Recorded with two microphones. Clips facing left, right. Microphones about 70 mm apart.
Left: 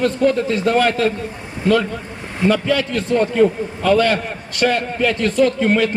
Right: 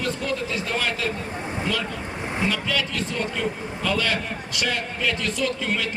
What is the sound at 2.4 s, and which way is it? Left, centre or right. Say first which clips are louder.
A man's voice: left 11 dB; left.